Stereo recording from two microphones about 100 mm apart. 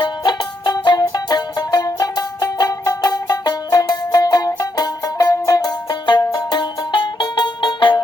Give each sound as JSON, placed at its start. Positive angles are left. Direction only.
{"t": 0.0, "sound": "music", "side_deg": 45}